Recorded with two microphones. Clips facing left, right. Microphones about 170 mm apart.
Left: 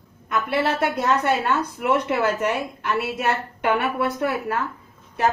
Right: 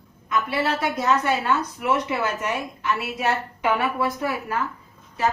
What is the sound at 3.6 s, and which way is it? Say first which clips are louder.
Speech: left 1 dB; 65° left (ahead or behind).